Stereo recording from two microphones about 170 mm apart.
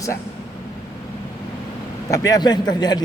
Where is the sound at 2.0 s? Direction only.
20° left (ahead or behind).